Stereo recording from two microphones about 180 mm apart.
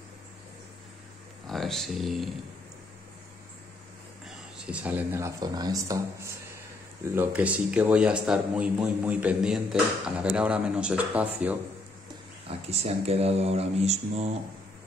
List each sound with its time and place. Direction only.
1.5 s speech: centre (ahead or behind)
4.6 s a man's voice: 10° right (ahead or behind)
12.4 s speech: 35° right (ahead or behind)